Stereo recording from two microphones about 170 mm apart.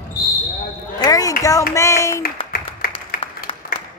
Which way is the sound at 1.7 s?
15° left (ahead or behind).